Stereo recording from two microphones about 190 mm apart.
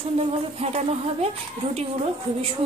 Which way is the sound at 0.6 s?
35° right (ahead or behind).